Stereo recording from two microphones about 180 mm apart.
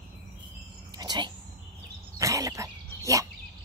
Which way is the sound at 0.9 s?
25° right (ahead or behind).